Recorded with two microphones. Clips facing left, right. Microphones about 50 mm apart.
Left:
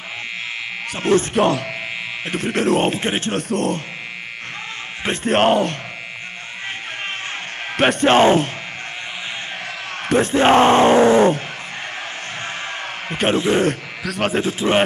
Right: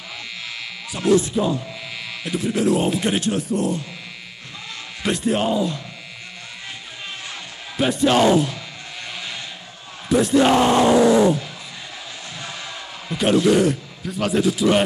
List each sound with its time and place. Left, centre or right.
0.9 s speech: left
1.3 s speech: left
2.2 s speech: left
3.0 s speech: left
3.3 s speech: left
5.0 s speech: left
5.3 s speech: left
7.7 s speech: left
10.0 s speech: left
13.1 s speech: left
13.4 s speech: left